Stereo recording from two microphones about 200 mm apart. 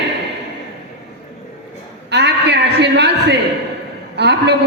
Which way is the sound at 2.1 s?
60° right (ahead or behind).